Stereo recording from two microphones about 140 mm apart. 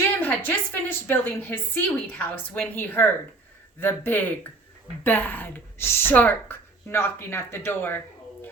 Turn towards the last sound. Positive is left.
turn(degrees=15)  # may be behind; listen again after turning